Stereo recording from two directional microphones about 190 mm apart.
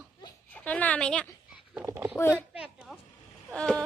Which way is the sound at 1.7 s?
15° right (ahead or behind).